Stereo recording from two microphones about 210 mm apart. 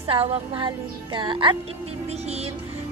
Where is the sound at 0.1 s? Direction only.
25° right (ahead or behind).